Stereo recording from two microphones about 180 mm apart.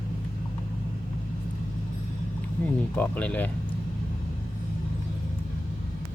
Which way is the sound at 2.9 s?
10° left (ahead or behind).